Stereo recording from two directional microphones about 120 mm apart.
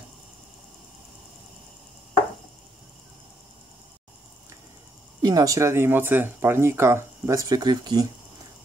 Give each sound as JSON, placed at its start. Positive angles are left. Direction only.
{"t": 5.2, "sound": "speech", "side_deg": -30}